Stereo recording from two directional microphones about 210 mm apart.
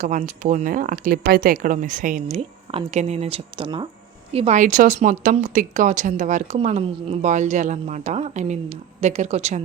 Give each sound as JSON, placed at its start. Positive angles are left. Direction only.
{"t": 0.0, "sound": "a woman's voice", "side_deg": -35}